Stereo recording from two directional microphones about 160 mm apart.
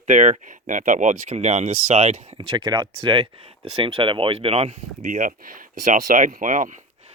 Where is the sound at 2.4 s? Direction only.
30° right (ahead or behind).